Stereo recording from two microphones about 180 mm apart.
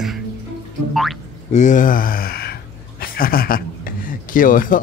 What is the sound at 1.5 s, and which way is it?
Speech, 40° left (ahead or behind).